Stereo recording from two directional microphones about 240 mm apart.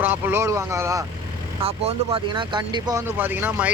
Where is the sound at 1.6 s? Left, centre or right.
Right; by 3.7 s centre.